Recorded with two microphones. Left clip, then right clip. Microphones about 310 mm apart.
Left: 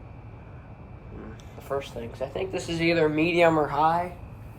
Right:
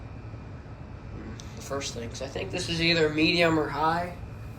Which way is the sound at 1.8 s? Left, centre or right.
Left.